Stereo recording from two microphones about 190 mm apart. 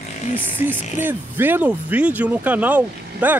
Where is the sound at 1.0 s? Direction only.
10° right (ahead or behind).